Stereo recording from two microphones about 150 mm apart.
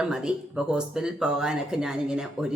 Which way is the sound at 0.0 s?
5° right (ahead or behind).